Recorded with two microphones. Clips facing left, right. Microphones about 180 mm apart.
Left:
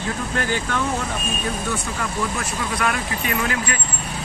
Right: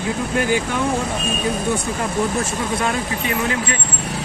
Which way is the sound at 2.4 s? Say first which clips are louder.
Right 3 dB; 25° right (ahead or behind).